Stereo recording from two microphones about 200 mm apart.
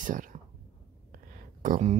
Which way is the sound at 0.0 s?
40° right (ahead or behind).